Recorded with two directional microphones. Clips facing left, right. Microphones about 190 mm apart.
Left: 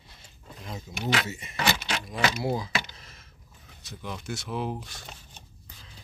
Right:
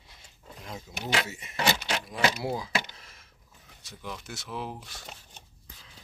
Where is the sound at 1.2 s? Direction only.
10° right (ahead or behind).